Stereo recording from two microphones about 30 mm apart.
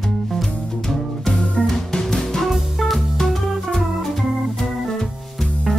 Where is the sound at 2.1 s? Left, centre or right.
Centre.